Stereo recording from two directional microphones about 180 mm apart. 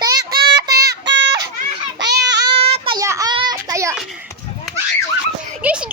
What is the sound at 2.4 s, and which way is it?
Child singing, 30° right (ahead or behind).